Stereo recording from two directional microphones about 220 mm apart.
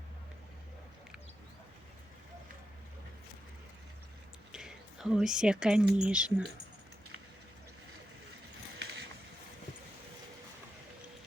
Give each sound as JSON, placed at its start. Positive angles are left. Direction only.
{"t": 4.5, "sound": "speech", "side_deg": -5}
{"t": 8.8, "sound": "vehicle", "side_deg": -55}